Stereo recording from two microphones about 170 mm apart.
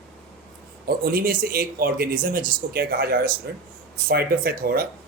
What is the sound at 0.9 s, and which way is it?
Speech, 60° right (ahead or behind).